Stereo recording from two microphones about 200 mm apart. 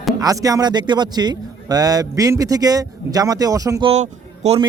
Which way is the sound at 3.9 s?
30° right (ahead or behind).